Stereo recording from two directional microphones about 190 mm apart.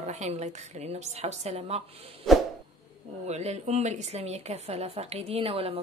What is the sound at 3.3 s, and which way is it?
Speech, 35° right (ahead or behind).